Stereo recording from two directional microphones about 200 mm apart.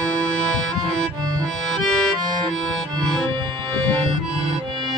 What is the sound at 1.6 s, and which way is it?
Accordion, centre (ahead or behind).